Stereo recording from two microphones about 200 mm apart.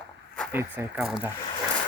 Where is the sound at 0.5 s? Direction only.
10° right (ahead or behind).